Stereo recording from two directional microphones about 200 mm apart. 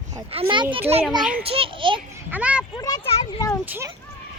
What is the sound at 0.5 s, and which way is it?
Speech, 25° right (ahead or behind).